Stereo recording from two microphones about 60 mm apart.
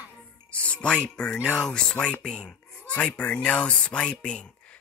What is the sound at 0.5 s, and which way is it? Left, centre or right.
Speech, left.